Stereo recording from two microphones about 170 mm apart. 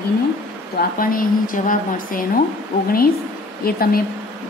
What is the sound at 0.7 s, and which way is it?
A woman's voice, 55° left (ahead or behind).